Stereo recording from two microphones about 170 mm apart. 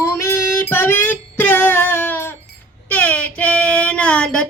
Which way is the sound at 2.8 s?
10° left (ahead or behind).